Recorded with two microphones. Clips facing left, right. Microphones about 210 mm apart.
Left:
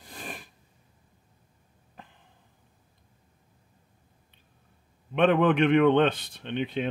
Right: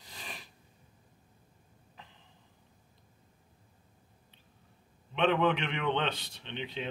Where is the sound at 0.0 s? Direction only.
50° left (ahead or behind).